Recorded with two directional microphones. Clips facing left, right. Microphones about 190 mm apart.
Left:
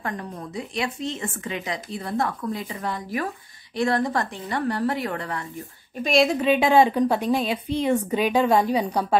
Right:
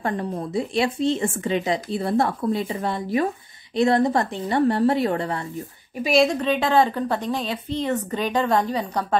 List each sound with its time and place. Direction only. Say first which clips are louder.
0.0 s a woman's voice: right 6 dB; 30° right (ahead or behind)
6.0 s a woman's voice: even; centre (ahead or behind)